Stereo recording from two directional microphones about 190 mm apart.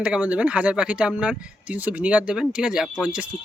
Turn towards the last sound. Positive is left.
turn(degrees=-5)  # may be behind; listen again after turning